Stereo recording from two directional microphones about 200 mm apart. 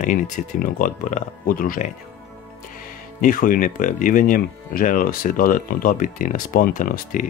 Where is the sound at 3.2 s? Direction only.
45° left (ahead or behind).